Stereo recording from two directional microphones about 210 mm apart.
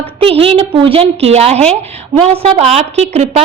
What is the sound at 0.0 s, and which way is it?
A woman's voice, 25° right (ahead or behind).